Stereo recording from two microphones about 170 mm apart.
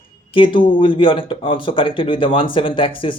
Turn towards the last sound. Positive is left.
turn(degrees=30)  # may be behind; listen again after turning